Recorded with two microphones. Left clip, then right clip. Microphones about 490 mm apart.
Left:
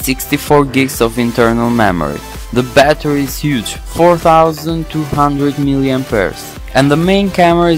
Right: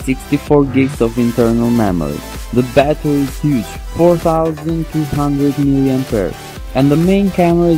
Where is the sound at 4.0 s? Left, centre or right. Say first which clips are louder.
Left 4 dB; left.